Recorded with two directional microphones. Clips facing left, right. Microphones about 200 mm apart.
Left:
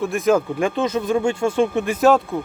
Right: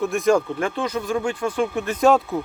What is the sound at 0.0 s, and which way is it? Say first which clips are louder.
Speech: left 1 dB; centre (ahead or behind).